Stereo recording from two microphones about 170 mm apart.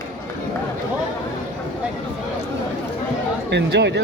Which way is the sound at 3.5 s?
90° right.